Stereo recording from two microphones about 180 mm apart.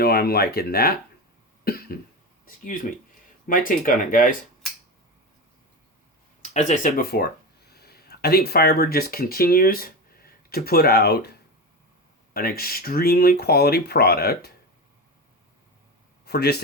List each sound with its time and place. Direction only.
0.0 s speech: 60° left (ahead or behind)
1.6 s cough: 55° left (ahead or behind)
3.4 s speech: 50° left (ahead or behind)
6.4 s speech: 40° left (ahead or behind); by 11.3 s 65° left (ahead or behind)
12.3 s speech: 60° left (ahead or behind)
16.2 s speech: 65° left (ahead or behind)